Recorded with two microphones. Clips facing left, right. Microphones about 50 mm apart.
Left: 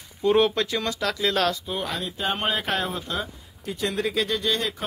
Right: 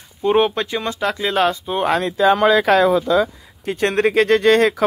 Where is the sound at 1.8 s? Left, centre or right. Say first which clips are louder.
Right 11 dB; right.